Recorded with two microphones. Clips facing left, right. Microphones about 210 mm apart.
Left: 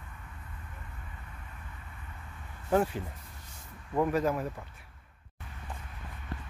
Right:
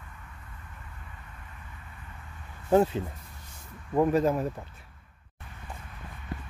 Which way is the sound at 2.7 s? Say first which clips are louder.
Right 5 dB; 25° right (ahead or behind).